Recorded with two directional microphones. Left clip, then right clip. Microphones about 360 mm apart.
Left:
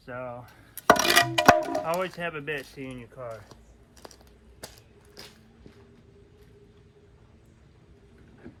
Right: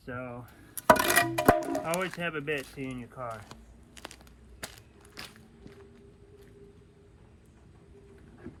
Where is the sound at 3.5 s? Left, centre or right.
Right.